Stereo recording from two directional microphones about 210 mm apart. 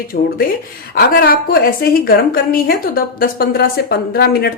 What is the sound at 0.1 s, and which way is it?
A woman's voice, 50° left (ahead or behind).